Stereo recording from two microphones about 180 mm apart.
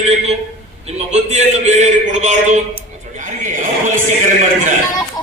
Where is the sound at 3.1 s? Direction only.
45° right (ahead or behind).